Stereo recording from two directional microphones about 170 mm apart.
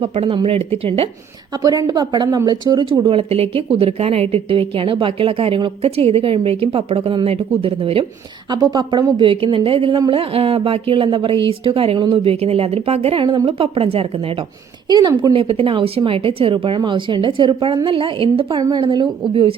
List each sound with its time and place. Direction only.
0.0 s a woman's voice: 35° right (ahead or behind)
1.6 s a woman's voice: 20° right (ahead or behind)
13.2 s a woman's voice: 20° right (ahead or behind)
13.6 s a woman's voice: 35° right (ahead or behind)